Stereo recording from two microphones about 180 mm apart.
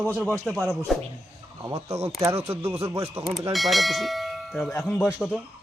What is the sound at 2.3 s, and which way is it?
Speech, 35° right (ahead or behind).